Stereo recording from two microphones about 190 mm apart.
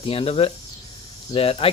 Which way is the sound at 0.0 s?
30° left (ahead or behind).